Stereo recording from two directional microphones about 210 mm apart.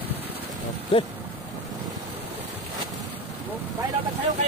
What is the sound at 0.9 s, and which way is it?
Speech, 25° left (ahead or behind).